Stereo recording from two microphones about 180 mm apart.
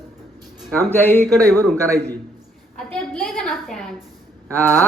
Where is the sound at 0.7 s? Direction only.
10° left (ahead or behind).